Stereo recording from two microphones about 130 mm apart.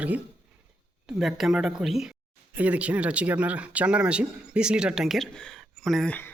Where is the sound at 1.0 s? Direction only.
5° right (ahead or behind).